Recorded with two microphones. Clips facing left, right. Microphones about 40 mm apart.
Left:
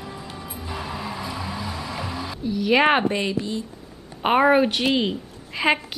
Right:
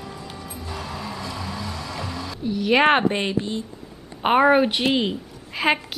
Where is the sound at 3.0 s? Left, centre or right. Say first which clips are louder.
Right 1 dB; right.